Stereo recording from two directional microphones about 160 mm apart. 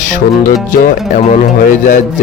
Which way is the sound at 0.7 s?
60° left (ahead or behind).